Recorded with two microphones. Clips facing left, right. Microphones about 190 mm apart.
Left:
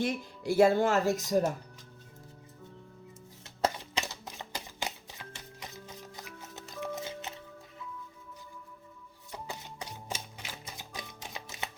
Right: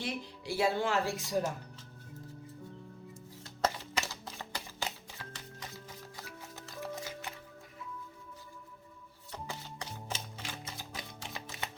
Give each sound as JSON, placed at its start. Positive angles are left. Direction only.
{"t": 0.0, "sound": "speech", "side_deg": 45}
{"t": 3.8, "sound": "music", "side_deg": 15}
{"t": 9.3, "sound": "music", "side_deg": 15}